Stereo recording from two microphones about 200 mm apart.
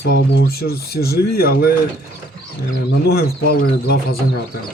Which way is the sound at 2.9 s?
50° left (ahead or behind).